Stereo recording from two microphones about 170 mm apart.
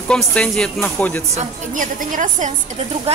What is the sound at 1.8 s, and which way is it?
Speech, 50° right (ahead or behind).